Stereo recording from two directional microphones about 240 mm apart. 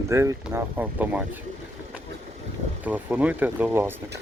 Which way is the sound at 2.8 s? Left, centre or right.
Centre.